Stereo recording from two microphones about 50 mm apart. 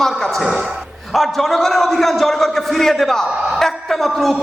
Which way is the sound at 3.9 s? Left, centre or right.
Centre.